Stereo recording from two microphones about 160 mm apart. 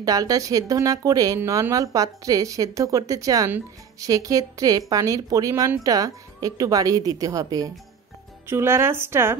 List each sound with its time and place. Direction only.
0.0 s a woman's voice: 20° right (ahead or behind)